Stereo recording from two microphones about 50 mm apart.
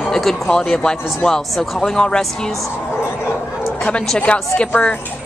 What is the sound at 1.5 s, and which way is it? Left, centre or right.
Speech, centre.